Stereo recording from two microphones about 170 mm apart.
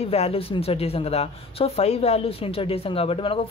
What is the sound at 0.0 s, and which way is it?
Speech, 35° left (ahead or behind).